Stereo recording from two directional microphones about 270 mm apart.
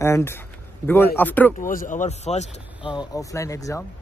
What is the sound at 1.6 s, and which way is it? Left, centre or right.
Speech, left.